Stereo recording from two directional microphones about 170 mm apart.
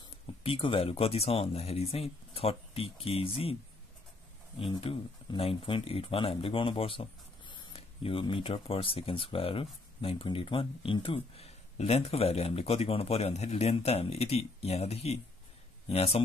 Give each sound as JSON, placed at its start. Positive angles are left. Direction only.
{"t": 0.4, "sound": "speech", "side_deg": 30}
{"t": 4.6, "sound": "speech", "side_deg": 30}